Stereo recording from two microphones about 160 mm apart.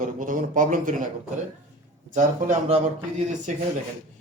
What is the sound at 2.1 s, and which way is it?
Speech, 40° right (ahead or behind).